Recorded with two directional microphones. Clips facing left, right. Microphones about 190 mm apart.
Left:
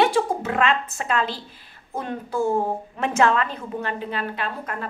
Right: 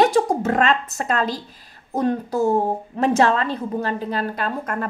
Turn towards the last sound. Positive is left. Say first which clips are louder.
# right 5 dB
turn(degrees=-45)  # may be behind; listen again after turning